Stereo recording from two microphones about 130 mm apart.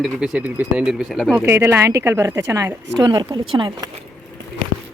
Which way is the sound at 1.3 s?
20° right (ahead or behind).